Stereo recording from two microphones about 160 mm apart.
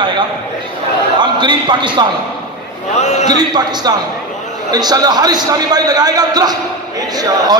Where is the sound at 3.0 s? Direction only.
45° left (ahead or behind).